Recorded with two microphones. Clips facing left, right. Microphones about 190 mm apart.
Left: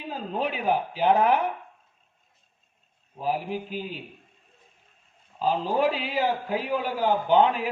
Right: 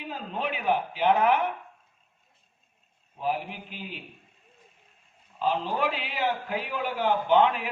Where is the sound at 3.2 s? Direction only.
40° left (ahead or behind).